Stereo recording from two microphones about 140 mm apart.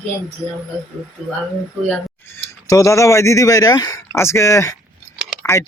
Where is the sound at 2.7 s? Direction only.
20° left (ahead or behind).